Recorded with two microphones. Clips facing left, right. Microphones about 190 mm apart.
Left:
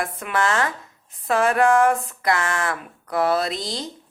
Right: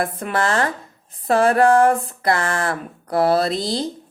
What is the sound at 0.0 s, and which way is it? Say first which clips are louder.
A woman's voice: right 2 dB; 35° right (ahead or behind).